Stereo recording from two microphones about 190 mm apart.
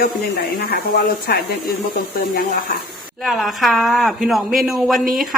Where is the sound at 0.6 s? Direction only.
55° left (ahead or behind).